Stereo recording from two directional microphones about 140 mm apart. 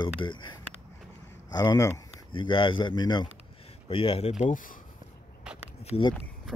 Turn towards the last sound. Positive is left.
turn(degrees=40)  # may be behind; listen again after turning